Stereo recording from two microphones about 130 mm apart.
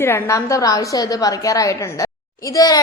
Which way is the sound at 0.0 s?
20° left (ahead or behind).